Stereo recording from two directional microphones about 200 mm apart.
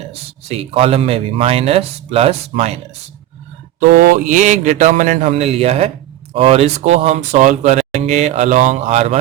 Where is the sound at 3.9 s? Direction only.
45° right (ahead or behind).